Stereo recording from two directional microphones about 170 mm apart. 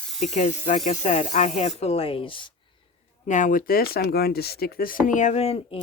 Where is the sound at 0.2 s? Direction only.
45° left (ahead or behind).